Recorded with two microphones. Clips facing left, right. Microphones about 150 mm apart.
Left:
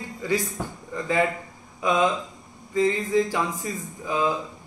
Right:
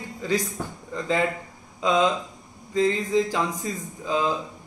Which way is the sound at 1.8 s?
20° right (ahead or behind).